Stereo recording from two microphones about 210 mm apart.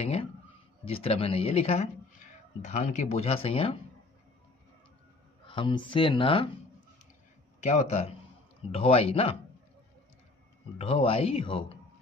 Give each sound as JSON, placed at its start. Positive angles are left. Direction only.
{"t": 0.0, "sound": "speech", "side_deg": 30}
{"t": 5.5, "sound": "speech", "side_deg": 25}
{"t": 7.6, "sound": "speech", "side_deg": 30}
{"t": 10.8, "sound": "speech", "side_deg": 30}